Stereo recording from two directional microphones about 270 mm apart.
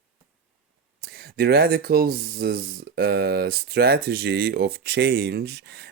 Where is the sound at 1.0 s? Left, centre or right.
Right.